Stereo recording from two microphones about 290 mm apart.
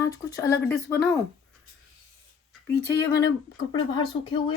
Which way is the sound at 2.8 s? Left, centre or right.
Centre.